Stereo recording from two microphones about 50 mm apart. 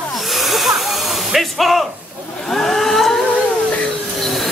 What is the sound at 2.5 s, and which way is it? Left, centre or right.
Vehicle, centre.